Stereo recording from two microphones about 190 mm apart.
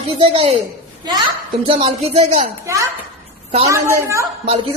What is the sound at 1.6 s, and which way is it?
Speech, 30° right (ahead or behind).